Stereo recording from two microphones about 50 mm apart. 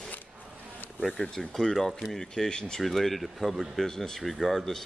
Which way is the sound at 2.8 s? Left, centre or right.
Centre.